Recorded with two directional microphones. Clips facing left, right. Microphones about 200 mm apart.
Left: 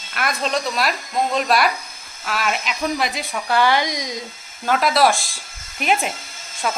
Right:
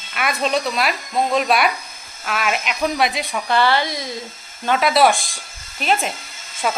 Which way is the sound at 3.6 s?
15° left (ahead or behind).